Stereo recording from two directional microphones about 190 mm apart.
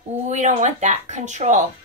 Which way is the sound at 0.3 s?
35° right (ahead or behind).